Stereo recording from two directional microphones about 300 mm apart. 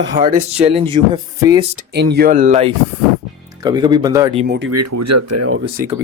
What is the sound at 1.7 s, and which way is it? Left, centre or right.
A man's voice, right.